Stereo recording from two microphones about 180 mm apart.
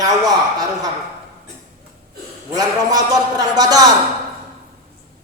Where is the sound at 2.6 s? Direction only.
20° right (ahead or behind).